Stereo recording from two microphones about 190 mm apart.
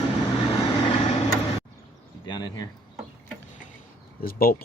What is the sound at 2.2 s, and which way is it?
Speech, 20° left (ahead or behind).